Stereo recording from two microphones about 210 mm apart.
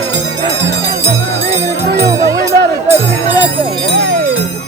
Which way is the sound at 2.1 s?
15° right (ahead or behind).